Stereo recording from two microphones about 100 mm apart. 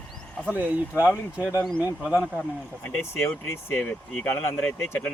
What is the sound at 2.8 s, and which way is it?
Speech, 20° left (ahead or behind).